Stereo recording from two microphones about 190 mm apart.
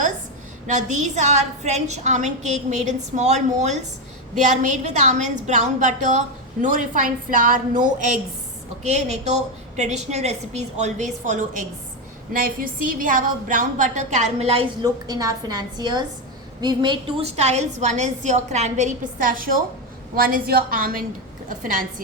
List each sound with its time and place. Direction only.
0.7 s a woman's voice: 40° right (ahead or behind)